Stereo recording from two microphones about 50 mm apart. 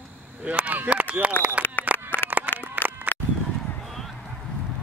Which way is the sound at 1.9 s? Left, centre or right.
Left.